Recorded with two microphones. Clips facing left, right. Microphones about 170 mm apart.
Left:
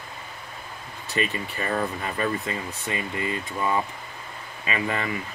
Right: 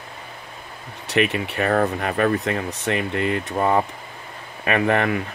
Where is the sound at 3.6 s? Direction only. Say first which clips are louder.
Right 6 dB; 55° right (ahead or behind).